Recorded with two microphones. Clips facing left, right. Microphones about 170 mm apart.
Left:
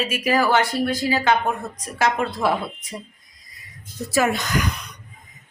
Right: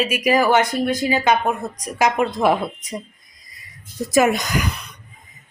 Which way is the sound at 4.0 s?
15° right (ahead or behind).